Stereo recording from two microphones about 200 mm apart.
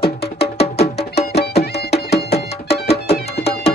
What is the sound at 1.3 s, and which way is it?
Music, 55° left (ahead or behind).